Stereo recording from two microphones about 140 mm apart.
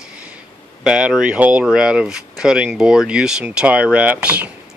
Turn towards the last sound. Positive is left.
turn(degrees=-10)  # may be behind; listen again after turning